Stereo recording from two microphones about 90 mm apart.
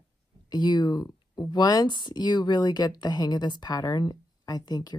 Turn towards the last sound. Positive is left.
turn(degrees=50)  # may be behind; listen again after turning